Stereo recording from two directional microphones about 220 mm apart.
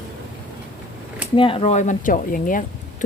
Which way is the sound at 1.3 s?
25° left (ahead or behind).